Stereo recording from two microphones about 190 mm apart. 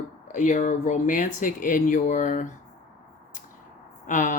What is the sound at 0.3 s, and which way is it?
Speech, 40° left (ahead or behind).